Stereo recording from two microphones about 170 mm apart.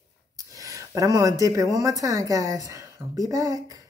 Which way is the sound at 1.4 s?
20° right (ahead or behind).